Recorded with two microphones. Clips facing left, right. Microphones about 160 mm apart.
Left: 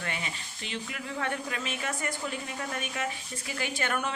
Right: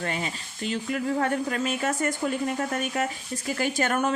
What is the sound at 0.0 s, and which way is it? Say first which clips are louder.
A woman's voice: right 6 dB; 35° right (ahead or behind).